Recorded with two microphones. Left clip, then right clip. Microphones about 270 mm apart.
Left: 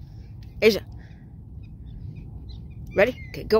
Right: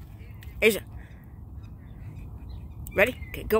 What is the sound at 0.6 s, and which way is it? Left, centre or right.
Speech, centre.